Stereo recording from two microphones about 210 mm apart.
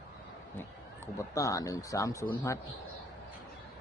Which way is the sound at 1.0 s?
15° left (ahead or behind).